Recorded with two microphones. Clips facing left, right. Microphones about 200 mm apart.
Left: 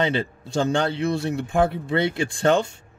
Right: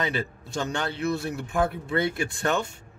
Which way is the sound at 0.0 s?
30° left (ahead or behind).